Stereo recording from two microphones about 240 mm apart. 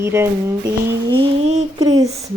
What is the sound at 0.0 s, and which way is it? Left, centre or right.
Speech, centre.